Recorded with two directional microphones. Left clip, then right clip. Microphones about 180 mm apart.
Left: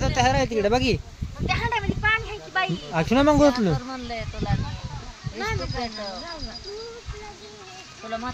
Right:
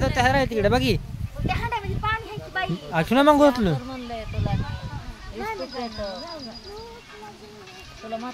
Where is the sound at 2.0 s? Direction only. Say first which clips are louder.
Left 5 dB; 30° right (ahead or behind).